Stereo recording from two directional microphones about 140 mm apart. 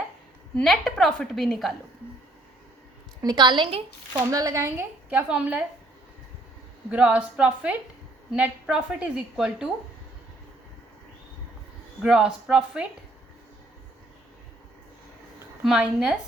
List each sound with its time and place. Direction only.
0.5 s a woman's voice: 5° left (ahead or behind)
3.2 s a woman's voice: 30° right (ahead or behind)
4.3 s a woman's voice: 25° right (ahead or behind)
6.9 s a woman's voice: 10° right (ahead or behind)
12.0 s a woman's voice: 5° right (ahead or behind)
15.6 s a woman's voice: 5° right (ahead or behind)